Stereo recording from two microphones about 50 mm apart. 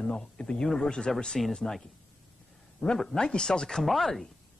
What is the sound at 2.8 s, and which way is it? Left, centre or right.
Speech, centre.